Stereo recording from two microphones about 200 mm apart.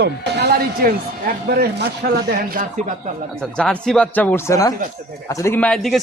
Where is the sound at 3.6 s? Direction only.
5° left (ahead or behind).